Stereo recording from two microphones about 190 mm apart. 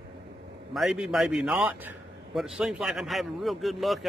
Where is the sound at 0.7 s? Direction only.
Centre (ahead or behind).